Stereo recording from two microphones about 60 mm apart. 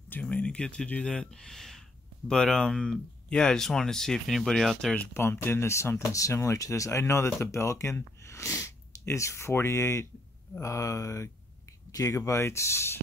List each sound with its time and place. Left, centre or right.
0.1 s speech: left; by 4.9 s centre
5.1 s speech: left
10.6 s speech: left
11.9 s speech: left